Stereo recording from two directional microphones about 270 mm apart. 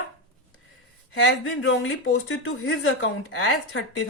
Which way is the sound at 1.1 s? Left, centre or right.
Left.